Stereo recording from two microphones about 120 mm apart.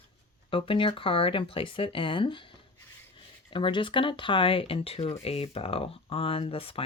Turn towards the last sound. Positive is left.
turn(degrees=50)  # may be behind; listen again after turning